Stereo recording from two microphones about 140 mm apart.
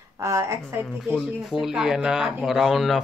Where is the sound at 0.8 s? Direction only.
Centre (ahead or behind).